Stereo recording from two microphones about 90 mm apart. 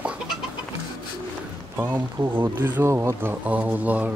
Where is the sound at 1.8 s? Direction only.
20° right (ahead or behind).